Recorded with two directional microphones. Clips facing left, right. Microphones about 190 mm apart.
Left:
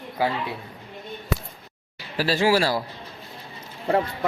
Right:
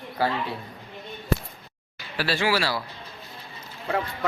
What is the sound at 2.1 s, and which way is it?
Speech, 40° left (ahead or behind).